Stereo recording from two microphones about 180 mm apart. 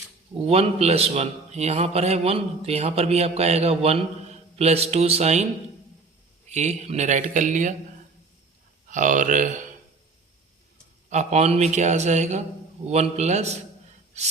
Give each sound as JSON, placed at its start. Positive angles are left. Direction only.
{"t": 0.4, "sound": "a man's voice", "side_deg": -35}
{"t": 6.5, "sound": "speech", "side_deg": -40}
{"t": 8.9, "sound": "speech", "side_deg": -45}
{"t": 11.1, "sound": "a man's voice", "side_deg": -40}